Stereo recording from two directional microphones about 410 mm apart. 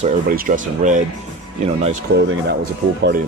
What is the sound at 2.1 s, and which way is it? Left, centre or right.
Speech, right.